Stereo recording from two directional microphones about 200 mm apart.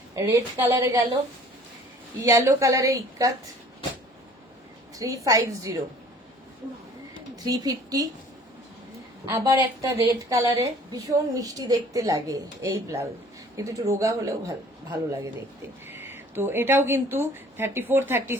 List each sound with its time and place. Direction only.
0.2 s a woman's voice: 15° right (ahead or behind)
2.2 s a woman's voice: 15° right (ahead or behind)
4.9 s a woman's voice: 15° right (ahead or behind)
7.4 s a woman's voice: 20° right (ahead or behind)
9.2 s a woman's voice: 15° right (ahead or behind)